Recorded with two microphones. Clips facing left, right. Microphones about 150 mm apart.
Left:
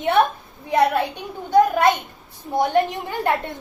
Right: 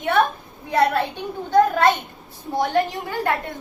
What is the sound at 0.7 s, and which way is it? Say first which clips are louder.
A child's voice: left 1 dB; 15° left (ahead or behind).